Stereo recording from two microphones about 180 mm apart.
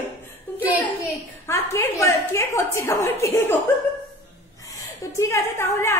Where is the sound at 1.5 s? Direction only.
15° left (ahead or behind).